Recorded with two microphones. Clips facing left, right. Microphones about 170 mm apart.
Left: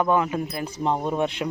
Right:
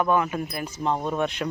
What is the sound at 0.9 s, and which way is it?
Speech, 15° left (ahead or behind).